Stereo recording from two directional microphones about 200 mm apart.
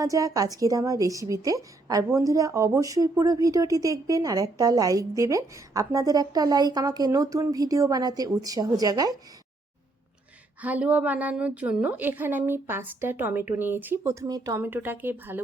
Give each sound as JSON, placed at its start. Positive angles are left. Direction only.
{"t": 0.0, "sound": "a woman's voice", "side_deg": -15}
{"t": 10.6, "sound": "a woman's voice", "side_deg": -10}